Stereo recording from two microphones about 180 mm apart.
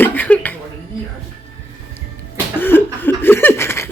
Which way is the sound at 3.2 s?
10° left (ahead or behind).